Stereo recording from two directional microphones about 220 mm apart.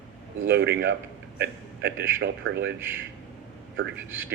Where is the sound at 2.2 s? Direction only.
50° right (ahead or behind).